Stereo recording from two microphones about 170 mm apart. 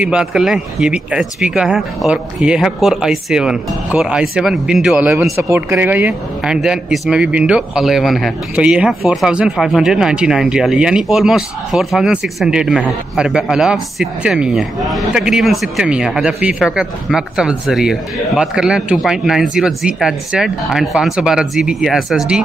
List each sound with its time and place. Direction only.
0.0 s speech: 5° right (ahead or behind)